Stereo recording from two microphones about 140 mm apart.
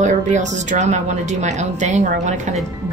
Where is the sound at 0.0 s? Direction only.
60° right (ahead or behind).